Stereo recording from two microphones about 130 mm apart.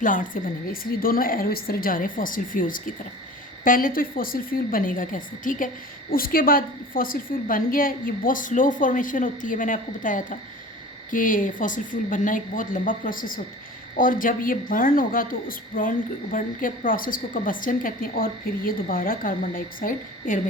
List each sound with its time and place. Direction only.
0.0 s a woman's voice: 90° left